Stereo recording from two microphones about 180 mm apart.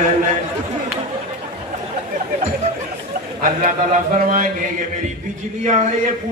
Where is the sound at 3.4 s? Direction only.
45° right (ahead or behind).